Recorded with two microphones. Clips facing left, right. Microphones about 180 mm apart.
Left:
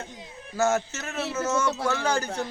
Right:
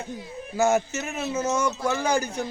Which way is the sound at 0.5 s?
10° right (ahead or behind).